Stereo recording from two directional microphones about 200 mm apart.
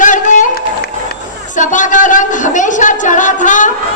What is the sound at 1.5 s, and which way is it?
A woman's voice, 40° left (ahead or behind).